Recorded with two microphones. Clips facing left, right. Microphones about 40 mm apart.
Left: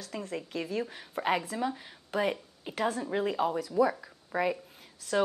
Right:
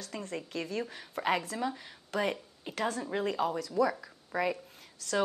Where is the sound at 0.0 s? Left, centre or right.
Centre.